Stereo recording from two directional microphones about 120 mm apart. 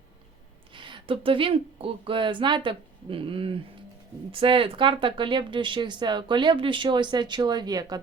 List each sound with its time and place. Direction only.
0.7 s speech: 45° right (ahead or behind)